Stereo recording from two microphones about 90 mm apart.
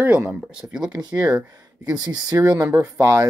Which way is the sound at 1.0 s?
45° right (ahead or behind).